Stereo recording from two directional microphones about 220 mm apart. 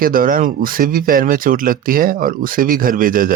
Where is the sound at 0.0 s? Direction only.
40° right (ahead or behind).